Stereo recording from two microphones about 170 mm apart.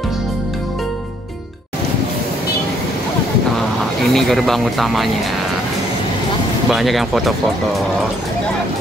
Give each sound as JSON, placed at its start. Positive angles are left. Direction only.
{"t": 4.1, "sound": "speech", "side_deg": 0}
{"t": 6.7, "sound": "speech", "side_deg": 0}